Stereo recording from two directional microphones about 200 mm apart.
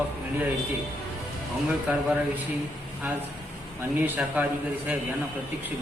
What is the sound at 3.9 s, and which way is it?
A man's voice, 10° right (ahead or behind).